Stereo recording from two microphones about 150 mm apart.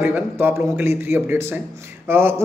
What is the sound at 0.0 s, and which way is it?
Speech, 15° right (ahead or behind).